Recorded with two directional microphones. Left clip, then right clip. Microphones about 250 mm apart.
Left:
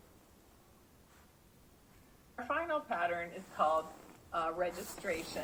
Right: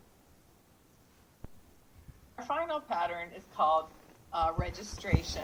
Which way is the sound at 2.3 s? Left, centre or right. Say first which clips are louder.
Right 2 dB; right.